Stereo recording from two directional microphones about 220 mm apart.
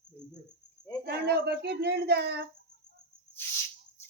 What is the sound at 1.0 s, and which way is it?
Speech, 45° right (ahead or behind).